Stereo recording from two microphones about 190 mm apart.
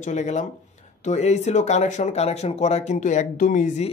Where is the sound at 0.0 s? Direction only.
40° left (ahead or behind).